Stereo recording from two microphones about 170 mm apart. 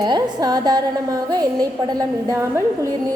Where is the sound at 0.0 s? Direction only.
25° right (ahead or behind).